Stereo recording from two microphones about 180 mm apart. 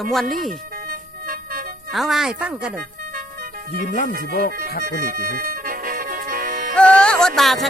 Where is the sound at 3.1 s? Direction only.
50° right (ahead or behind).